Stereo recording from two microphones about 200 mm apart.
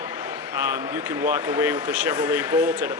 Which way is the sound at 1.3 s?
15° right (ahead or behind).